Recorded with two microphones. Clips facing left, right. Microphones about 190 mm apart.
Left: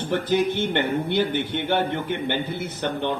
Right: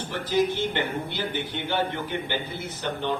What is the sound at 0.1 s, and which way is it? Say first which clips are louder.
Speech: left 2 dB; 60° left (ahead or behind).